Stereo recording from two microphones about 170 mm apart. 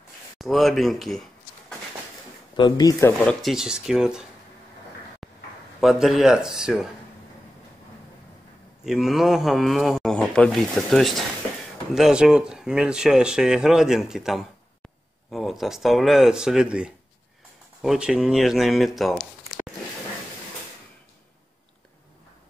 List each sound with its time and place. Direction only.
0.4 s speech: centre (ahead or behind)
2.5 s speech: 25° left (ahead or behind)
3.3 s speech: centre (ahead or behind)
5.8 s speech: centre (ahead or behind)
8.8 s speech: centre (ahead or behind)